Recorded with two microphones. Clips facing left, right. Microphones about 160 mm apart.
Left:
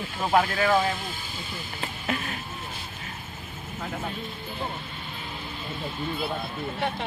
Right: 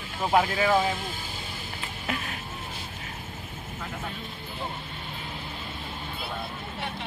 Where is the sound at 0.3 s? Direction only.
10° right (ahead or behind).